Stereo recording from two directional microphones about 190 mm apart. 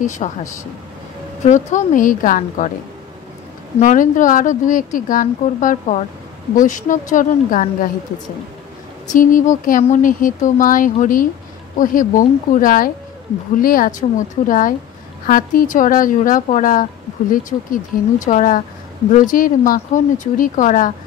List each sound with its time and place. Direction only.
0.0 s speech: 40° left (ahead or behind)
3.8 s a woman's voice: 40° left (ahead or behind)
9.1 s a woman's voice: 45° left (ahead or behind)